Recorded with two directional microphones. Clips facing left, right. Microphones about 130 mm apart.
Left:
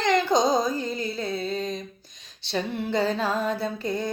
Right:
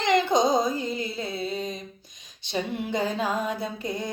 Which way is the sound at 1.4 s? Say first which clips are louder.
Left 2 dB; 5° right (ahead or behind).